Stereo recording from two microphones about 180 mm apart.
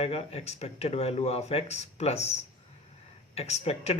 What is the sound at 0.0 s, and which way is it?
Speech, 35° left (ahead or behind).